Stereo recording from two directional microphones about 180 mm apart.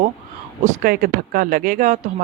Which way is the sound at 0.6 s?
50° right (ahead or behind).